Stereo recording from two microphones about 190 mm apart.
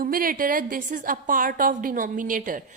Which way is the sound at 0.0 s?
50° right (ahead or behind).